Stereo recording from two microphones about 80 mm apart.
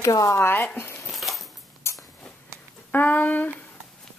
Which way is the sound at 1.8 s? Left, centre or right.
Left.